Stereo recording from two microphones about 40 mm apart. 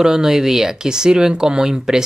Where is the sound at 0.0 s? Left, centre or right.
Centre.